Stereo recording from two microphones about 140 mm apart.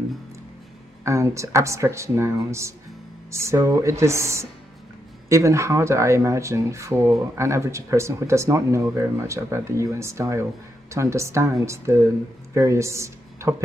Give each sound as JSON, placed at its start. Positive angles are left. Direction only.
{"t": 1.0, "sound": "speech", "side_deg": -20}